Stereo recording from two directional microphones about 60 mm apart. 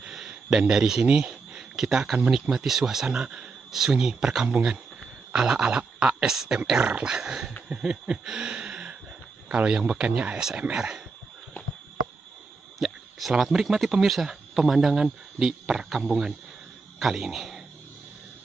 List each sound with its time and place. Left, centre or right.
0.0 s a sound: centre
1.0 s speech: centre
3.1 s speech: centre
7.6 s a sound: centre
9.6 s speech: centre
12.7 s speech: centre